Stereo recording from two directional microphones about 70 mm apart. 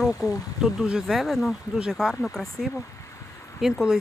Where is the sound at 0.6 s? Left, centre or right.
Centre.